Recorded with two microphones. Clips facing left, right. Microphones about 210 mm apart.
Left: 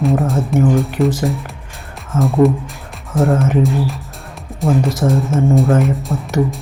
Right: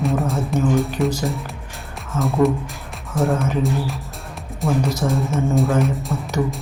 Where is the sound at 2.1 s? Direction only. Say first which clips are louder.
Left 5 dB; centre (ahead or behind).